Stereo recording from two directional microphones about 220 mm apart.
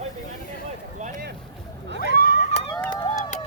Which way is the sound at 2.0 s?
40° left (ahead or behind).